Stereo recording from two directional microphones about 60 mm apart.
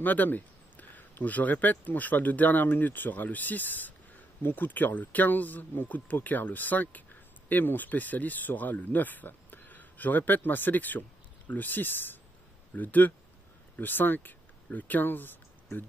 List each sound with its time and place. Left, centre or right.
0.0 s speech: left